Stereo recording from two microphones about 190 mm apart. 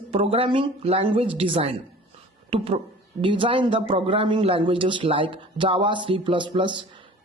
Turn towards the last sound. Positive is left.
turn(degrees=-25)  # may be behind; listen again after turning